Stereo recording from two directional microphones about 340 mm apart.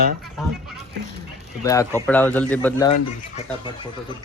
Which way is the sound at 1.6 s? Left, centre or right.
Centre.